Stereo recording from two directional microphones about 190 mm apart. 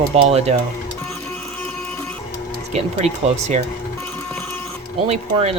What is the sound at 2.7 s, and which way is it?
Speech, 35° right (ahead or behind).